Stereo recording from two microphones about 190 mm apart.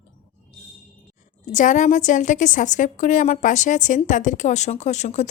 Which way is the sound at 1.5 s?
40° left (ahead or behind).